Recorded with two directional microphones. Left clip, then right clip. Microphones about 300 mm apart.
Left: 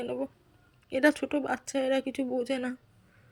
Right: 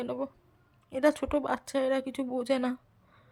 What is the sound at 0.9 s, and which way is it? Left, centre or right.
Speech, centre.